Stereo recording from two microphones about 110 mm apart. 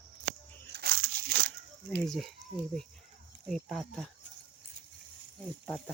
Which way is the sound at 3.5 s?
Centre (ahead or behind).